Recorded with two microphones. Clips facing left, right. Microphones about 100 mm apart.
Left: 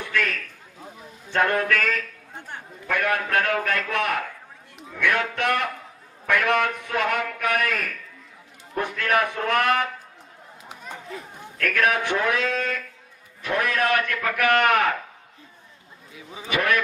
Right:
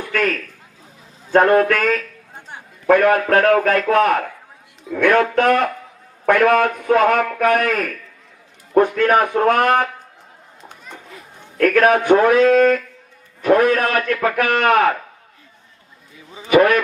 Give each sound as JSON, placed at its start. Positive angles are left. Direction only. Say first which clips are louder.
{"t": 0.1, "sound": "a man's voice", "louder": "right 7 dB", "side_deg": -40}
{"t": 11.5, "sound": "a man's voice", "louder": "right 9 dB", "side_deg": -45}
{"t": 16.1, "sound": "speech", "louder": "right 1 dB", "side_deg": 5}
{"t": 16.5, "sound": "a man's voice", "louder": "right 10 dB", "side_deg": -35}